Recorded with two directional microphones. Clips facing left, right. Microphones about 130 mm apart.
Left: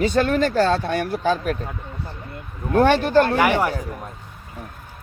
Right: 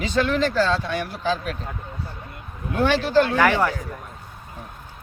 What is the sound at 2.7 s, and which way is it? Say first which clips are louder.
Speech: left 3 dB; 50° left (ahead or behind).